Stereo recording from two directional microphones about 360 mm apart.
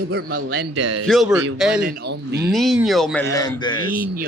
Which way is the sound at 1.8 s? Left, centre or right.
Right.